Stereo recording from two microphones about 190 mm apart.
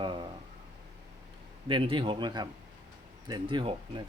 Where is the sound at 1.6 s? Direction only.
25° right (ahead or behind).